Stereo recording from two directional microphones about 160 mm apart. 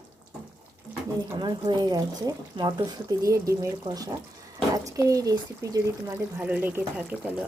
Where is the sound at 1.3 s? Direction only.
30° right (ahead or behind); by 7.3 s 10° right (ahead or behind).